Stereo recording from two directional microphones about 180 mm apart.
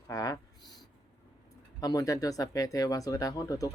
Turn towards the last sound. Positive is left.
turn(degrees=20)  # may be behind; listen again after turning